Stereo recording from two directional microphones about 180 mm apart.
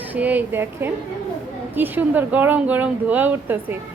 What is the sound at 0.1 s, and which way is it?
Speech, 10° right (ahead or behind).